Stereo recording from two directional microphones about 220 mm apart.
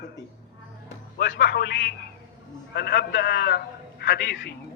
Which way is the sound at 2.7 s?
50° left (ahead or behind).